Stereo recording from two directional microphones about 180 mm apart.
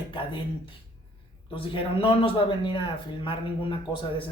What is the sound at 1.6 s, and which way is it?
Speech, 30° left (ahead or behind).